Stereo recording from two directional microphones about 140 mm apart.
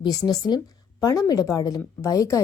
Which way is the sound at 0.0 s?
25° left (ahead or behind).